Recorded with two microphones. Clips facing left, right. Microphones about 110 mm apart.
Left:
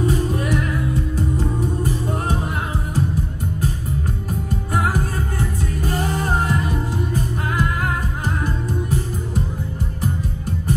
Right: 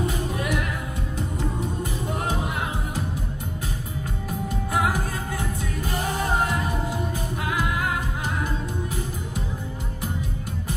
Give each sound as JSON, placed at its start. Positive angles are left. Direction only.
{"t": 0.1, "sound": "music", "side_deg": 40}
{"t": 4.7, "sound": "music", "side_deg": 40}